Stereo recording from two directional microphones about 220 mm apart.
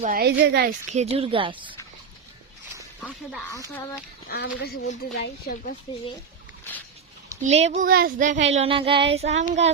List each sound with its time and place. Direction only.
0.0 s a woman's voice: 40° right (ahead or behind)
0.9 s a woman's voice: 30° right (ahead or behind)
4.3 s speech: 45° left (ahead or behind)
7.4 s a woman's voice: 30° right (ahead or behind)
7.9 s child singing: 45° right (ahead or behind)
8.5 s a woman's voice: 25° right (ahead or behind)
9.4 s child singing: 30° right (ahead or behind)